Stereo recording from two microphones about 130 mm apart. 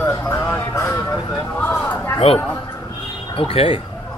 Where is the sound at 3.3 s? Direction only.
45° left (ahead or behind).